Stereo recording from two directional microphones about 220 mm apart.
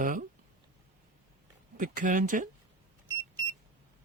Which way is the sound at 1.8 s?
35° right (ahead or behind).